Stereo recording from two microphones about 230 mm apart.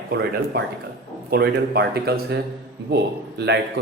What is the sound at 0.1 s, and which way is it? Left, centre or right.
Speech, right.